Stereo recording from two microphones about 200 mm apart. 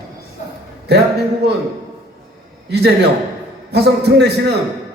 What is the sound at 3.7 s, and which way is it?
Speech, 55° right (ahead or behind).